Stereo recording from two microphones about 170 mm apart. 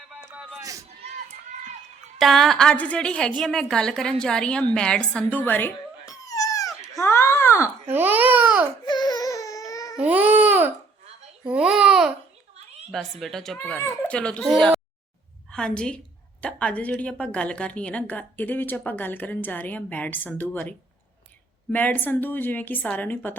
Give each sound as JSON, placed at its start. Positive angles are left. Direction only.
{"t": 0.1, "sound": "a sound", "side_deg": -10}
{"t": 0.6, "sound": "speech", "side_deg": -20}
{"t": 2.1, "sound": "a woman's voice", "side_deg": 0}
{"t": 7.9, "sound": "speech", "side_deg": -10}
{"t": 8.8, "sound": "baby cry", "side_deg": 25}
{"t": 10.0, "sound": "baby cry", "side_deg": -10}
{"t": 11.4, "sound": "a woman's voice", "side_deg": -5}
{"t": 13.7, "sound": "a woman's voice", "side_deg": 15}